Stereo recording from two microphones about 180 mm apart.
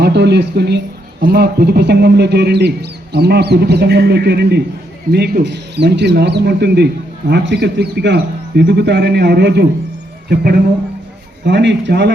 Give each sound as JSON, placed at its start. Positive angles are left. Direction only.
{"t": 0.0, "sound": "a man's voice", "side_deg": -70}
{"t": 10.2, "sound": "speech", "side_deg": -55}
{"t": 11.4, "sound": "a man's voice", "side_deg": -75}